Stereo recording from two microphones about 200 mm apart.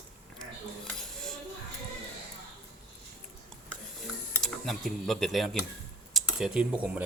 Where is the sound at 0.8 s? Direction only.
5° left (ahead or behind).